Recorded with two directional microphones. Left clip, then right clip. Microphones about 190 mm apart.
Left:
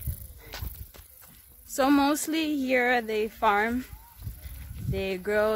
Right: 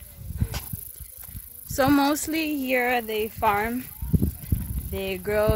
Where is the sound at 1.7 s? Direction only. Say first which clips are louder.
Right 2 dB; centre (ahead or behind).